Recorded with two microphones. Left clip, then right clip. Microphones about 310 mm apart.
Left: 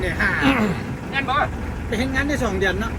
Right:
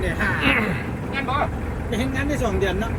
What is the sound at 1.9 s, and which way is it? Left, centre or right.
Speech, left.